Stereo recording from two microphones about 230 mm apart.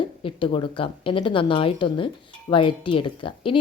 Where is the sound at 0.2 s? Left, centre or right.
Left.